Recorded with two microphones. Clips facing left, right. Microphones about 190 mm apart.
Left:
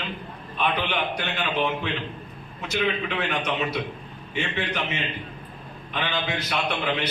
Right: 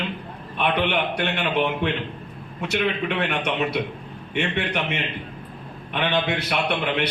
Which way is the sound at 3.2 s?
60° right (ahead or behind).